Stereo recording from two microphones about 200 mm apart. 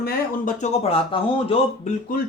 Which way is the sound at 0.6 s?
30° left (ahead or behind).